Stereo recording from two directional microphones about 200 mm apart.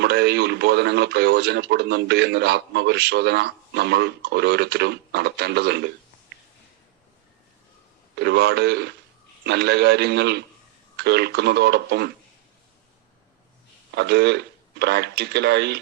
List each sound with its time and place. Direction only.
0.0 s speech: 55° right (ahead or behind)
8.2 s speech: 55° right (ahead or behind)
13.9 s speech: 55° right (ahead or behind)